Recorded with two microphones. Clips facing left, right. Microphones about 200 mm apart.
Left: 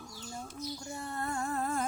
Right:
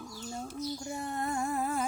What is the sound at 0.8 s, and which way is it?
Female singing, 15° right (ahead or behind).